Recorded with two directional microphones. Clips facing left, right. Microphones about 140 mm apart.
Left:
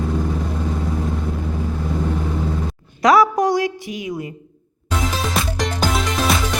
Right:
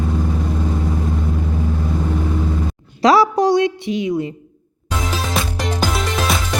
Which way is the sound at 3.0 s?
25° right (ahead or behind).